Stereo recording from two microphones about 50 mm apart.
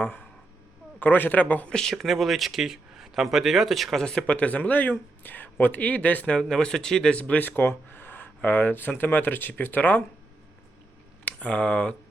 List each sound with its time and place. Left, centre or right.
0.0 s a sound: left
0.9 s speech: left
1.7 s speech: centre
2.0 s speech: centre
4.0 s speech: centre
4.3 s speech: left
6.5 s speech: centre; by 7.4 s left
7.4 s speech: left
11.3 s speech: left